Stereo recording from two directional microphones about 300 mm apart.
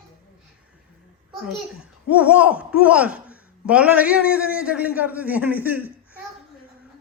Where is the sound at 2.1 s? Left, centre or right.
Centre.